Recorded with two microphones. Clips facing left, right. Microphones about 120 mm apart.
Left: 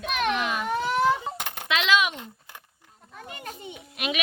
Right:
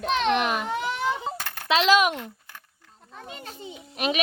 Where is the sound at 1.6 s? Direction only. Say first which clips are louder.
Right 4 dB; 35° right (ahead or behind).